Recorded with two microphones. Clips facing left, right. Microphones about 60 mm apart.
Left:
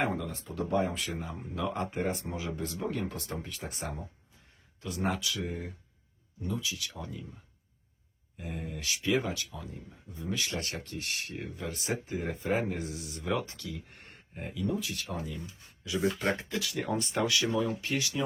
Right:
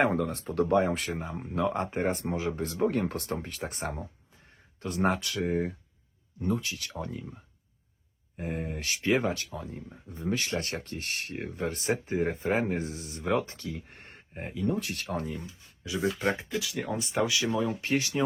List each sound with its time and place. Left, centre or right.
0.0 s speech: right
5.0 s speech: right
8.4 s speech: right
14.7 s speech: right
16.0 s speech: centre
17.3 s speech: right
17.7 s speech: right